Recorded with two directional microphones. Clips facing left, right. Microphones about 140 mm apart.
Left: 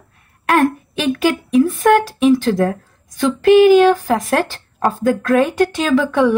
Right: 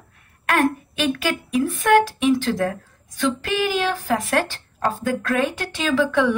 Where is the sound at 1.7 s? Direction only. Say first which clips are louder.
Left 3 dB; 40° left (ahead or behind).